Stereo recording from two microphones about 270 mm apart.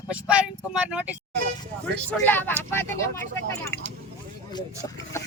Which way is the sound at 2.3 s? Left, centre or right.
Centre.